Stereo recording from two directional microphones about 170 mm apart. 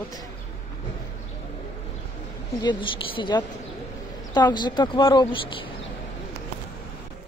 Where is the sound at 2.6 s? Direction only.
30° left (ahead or behind).